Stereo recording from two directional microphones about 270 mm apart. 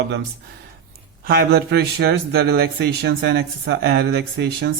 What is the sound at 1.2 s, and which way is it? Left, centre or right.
A man's voice, right.